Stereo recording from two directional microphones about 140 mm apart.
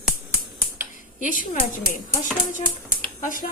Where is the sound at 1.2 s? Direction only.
65° left (ahead or behind).